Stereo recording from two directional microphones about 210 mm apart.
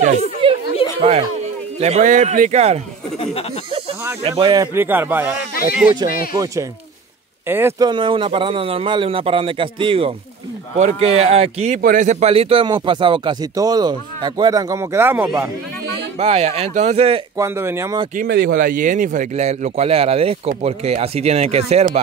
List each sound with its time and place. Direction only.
0.4 s a sound: 25° right (ahead or behind)
1.8 s a man's voice: 30° right (ahead or behind)
4.2 s a man's voice: 25° right (ahead or behind)
4.7 s speech: 10° right (ahead or behind)
7.9 s a man's voice: 20° right (ahead or behind)
16.2 s a man's voice: 30° right (ahead or behind)
17.4 s speech: 10° right (ahead or behind)
18.1 s speech: 50° right (ahead or behind)
18.9 s a man's voice: 35° right (ahead or behind)